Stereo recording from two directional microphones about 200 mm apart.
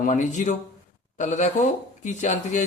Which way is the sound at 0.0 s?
35° left (ahead or behind).